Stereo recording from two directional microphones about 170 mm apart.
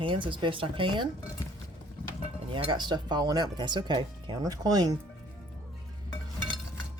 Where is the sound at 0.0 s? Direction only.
30° right (ahead or behind).